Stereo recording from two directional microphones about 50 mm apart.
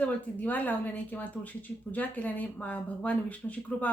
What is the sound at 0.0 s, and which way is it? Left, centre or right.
Speech, left.